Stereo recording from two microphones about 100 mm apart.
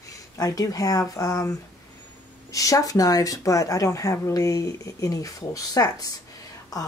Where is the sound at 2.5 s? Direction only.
35° left (ahead or behind).